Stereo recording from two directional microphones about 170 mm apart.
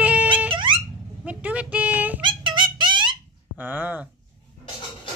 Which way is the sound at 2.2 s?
30° right (ahead or behind).